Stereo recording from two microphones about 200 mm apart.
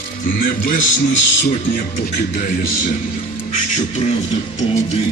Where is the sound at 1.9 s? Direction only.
45° left (ahead or behind).